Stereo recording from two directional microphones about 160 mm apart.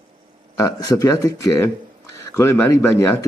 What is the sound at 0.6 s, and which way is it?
Speech, 20° left (ahead or behind).